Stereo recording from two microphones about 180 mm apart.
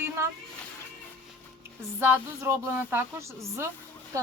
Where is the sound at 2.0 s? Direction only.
15° right (ahead or behind).